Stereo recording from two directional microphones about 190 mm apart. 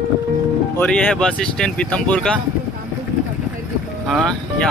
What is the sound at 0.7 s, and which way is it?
Speech, 5° left (ahead or behind).